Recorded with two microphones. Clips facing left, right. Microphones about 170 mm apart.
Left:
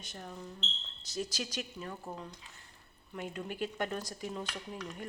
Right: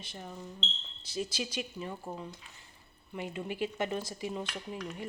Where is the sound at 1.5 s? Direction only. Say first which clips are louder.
Right 3 dB; 5° right (ahead or behind).